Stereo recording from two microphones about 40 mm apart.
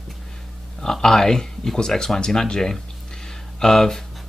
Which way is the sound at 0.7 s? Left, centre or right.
Centre.